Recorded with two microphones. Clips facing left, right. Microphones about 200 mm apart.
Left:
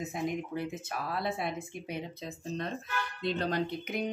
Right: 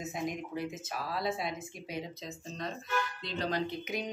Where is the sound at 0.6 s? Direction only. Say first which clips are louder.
Left 1 dB; 60° left (ahead or behind).